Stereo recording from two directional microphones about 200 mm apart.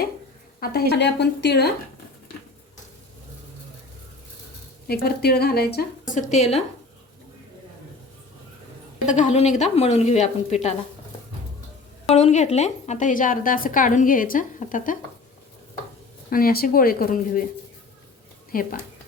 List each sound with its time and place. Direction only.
0.6 s a woman's voice: 50° left (ahead or behind)
4.9 s a woman's voice: 50° left (ahead or behind); by 6.6 s 35° left (ahead or behind)
9.0 s a woman's voice: 35° left (ahead or behind)
12.0 s a woman's voice: 35° left (ahead or behind)
16.3 s a woman's voice: 50° left (ahead or behind)
18.5 s a woman's voice: 45° left (ahead or behind)